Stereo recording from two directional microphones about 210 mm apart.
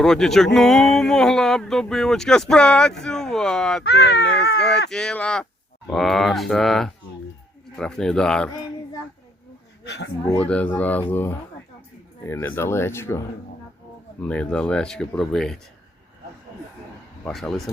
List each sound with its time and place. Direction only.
0.0 s speech: centre (ahead or behind)
3.8 s speech: 50° left (ahead or behind)
4.9 s speech: 5° left (ahead or behind)
9.8 s speech: 55° left (ahead or behind)
10.2 s speech: 5° left (ahead or behind)
17.2 s speech: 5° left (ahead or behind)